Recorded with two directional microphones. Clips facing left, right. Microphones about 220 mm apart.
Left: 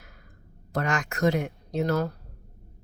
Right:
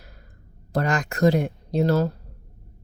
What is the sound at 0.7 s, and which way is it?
Speech, 35° right (ahead or behind).